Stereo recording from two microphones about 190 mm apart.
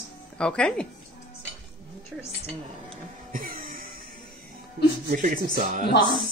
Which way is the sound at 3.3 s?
45° right (ahead or behind).